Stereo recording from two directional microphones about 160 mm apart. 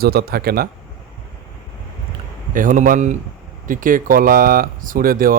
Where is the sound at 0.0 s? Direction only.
75° right (ahead or behind).